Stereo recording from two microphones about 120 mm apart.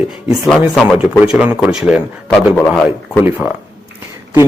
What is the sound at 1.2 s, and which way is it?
Speech, 10° right (ahead or behind).